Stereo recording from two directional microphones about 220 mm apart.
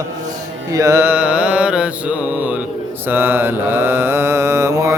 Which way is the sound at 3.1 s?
10° right (ahead or behind).